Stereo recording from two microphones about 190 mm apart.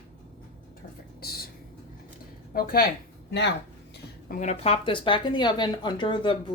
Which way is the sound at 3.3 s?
65° left (ahead or behind).